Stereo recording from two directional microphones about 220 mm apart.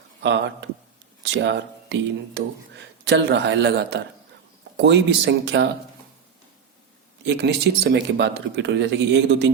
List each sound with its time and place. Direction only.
0.2 s speech: 55° right (ahead or behind)
7.3 s speech: 50° right (ahead or behind)